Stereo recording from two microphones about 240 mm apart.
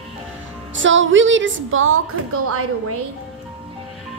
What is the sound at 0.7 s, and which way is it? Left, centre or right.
A woman's voice, right.